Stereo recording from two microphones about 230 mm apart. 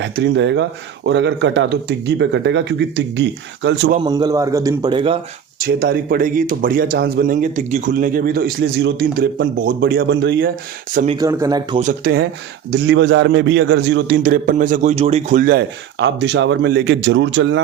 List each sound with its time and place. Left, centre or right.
0.0 s a man's voice: right
4.0 s a man's voice: centre
5.6 s speech: right
10.9 s speech: right
11.2 s a man's voice: centre
11.8 s speech: right
12.7 s a man's voice: right